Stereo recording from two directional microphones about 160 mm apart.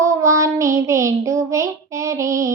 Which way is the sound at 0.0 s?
20° right (ahead or behind).